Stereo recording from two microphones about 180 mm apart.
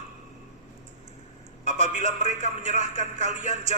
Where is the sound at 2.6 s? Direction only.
40° right (ahead or behind).